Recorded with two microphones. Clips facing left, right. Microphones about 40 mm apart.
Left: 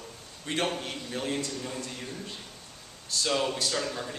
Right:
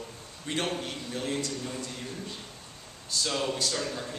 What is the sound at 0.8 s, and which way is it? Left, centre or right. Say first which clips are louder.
Speech: even; centre.